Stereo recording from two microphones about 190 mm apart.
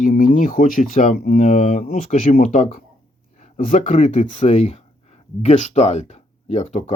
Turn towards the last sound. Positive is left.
turn(degrees=35)  # may be behind; listen again after turning